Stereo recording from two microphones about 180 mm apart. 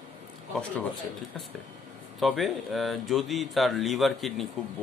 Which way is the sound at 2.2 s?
Centre (ahead or behind).